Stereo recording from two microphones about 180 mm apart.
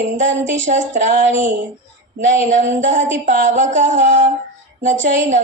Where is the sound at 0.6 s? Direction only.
45° right (ahead or behind).